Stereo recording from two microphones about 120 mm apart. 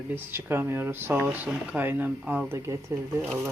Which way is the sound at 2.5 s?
25° right (ahead or behind).